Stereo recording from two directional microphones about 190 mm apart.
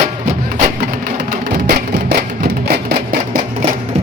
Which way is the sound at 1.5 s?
55° right (ahead or behind).